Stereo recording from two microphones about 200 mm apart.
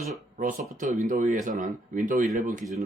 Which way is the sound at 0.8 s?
40° right (ahead or behind).